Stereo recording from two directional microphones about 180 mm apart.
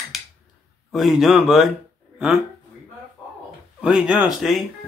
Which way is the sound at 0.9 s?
Centre (ahead or behind).